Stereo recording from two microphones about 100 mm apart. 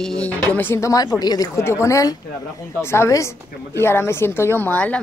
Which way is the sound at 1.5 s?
25° left (ahead or behind).